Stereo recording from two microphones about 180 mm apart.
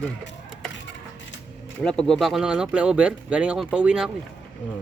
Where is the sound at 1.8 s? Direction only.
5° left (ahead or behind).